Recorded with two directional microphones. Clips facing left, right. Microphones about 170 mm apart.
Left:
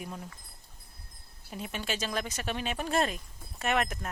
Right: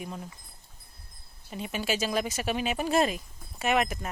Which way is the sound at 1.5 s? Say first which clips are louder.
Right 5 dB; centre (ahead or behind).